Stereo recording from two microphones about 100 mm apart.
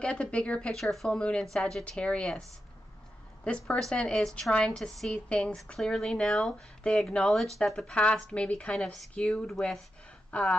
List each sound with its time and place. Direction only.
0.0 s speech: 10° left (ahead or behind)
3.4 s a woman's voice: 10° left (ahead or behind)